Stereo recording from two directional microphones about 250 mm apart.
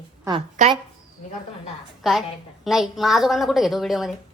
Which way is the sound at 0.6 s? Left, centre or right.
Right.